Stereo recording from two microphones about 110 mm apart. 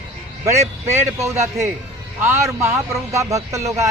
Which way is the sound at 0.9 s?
25° right (ahead or behind).